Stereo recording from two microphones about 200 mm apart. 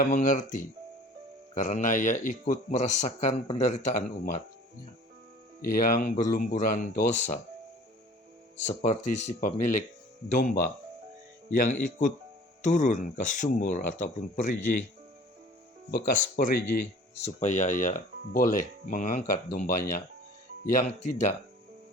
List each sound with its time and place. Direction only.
0.0 s speech: 40° left (ahead or behind)
5.6 s speech: 45° left (ahead or behind)
8.5 s speech: 35° left (ahead or behind)
15.9 s speech: 45° left (ahead or behind)
17.2 s speech: 35° left (ahead or behind)